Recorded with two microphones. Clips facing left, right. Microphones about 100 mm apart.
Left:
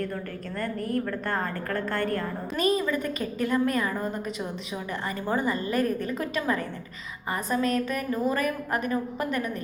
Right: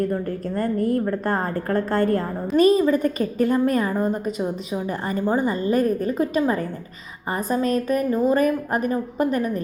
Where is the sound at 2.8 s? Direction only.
40° right (ahead or behind).